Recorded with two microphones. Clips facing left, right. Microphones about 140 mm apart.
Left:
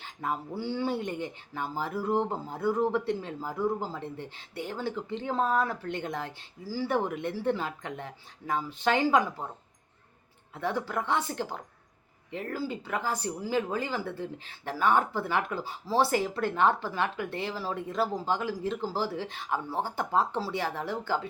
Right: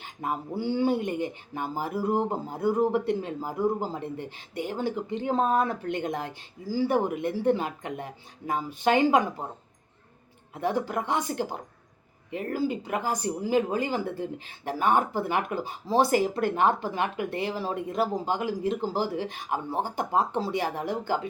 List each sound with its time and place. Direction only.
0.0 s speech: 15° right (ahead or behind)
10.5 s speech: 15° right (ahead or behind)